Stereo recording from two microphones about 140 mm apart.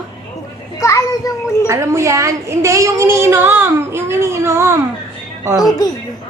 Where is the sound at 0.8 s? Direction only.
20° left (ahead or behind).